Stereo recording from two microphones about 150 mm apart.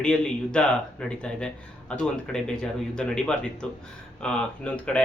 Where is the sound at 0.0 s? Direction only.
5° left (ahead or behind).